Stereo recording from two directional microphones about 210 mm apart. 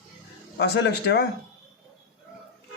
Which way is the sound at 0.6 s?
55° left (ahead or behind).